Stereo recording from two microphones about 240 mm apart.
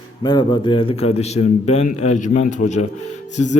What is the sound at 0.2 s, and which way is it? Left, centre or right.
A man's voice, centre.